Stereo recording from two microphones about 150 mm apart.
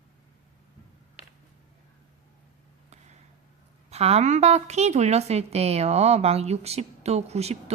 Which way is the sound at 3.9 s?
45° right (ahead or behind).